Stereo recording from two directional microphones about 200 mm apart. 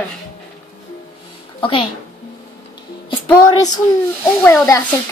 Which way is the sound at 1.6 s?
25° left (ahead or behind).